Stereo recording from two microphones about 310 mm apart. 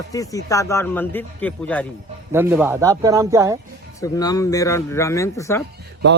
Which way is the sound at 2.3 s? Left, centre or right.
Centre.